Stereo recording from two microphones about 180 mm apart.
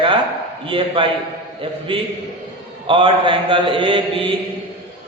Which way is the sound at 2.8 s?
30° right (ahead or behind).